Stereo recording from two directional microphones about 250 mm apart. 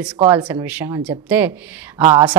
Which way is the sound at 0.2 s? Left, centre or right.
Centre.